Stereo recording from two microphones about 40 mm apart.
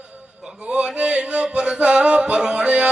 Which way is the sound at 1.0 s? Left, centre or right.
Right.